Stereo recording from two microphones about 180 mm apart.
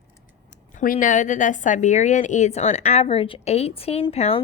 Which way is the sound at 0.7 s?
45° left (ahead or behind).